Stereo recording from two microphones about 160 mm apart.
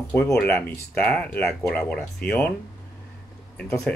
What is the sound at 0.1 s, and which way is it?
Speech, 10° left (ahead or behind).